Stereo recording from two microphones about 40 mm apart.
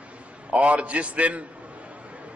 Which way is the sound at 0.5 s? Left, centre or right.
Right.